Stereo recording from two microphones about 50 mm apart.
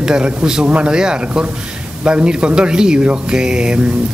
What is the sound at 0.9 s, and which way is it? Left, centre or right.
Speech, centre.